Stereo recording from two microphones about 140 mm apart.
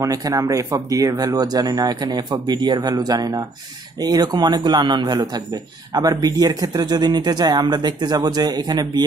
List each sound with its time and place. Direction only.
0.0 s a man's voice: 25° right (ahead or behind)